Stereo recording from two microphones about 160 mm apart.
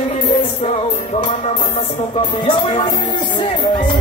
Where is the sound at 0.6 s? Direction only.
35° left (ahead or behind).